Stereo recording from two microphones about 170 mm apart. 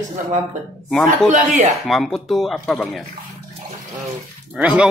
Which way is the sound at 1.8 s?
Centre (ahead or behind).